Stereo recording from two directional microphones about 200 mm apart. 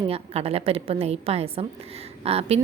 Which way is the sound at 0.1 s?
30° right (ahead or behind).